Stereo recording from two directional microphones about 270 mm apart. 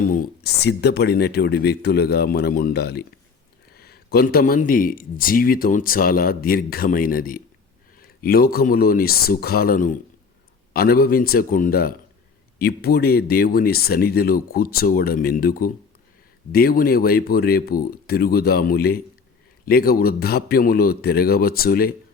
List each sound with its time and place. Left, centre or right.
0.0 s speech: left